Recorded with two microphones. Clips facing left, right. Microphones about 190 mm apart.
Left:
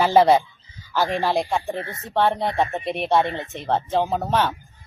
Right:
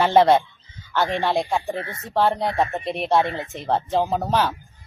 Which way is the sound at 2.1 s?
Centre (ahead or behind).